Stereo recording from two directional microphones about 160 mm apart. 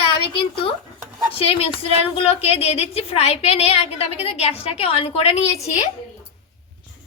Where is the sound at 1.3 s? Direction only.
35° left (ahead or behind).